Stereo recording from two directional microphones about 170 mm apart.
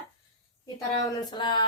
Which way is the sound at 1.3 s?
25° left (ahead or behind).